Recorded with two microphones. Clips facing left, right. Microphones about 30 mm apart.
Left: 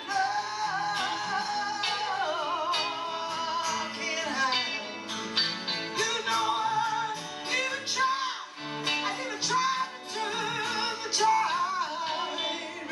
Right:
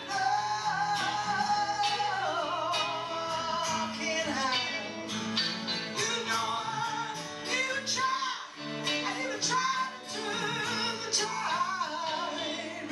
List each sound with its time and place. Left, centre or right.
0.1 s music: centre
5.9 s music: centre